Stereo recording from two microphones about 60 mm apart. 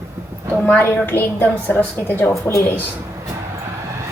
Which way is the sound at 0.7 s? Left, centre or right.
Left.